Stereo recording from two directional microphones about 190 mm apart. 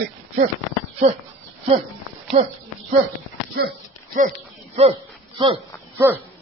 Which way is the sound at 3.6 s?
50° right (ahead or behind).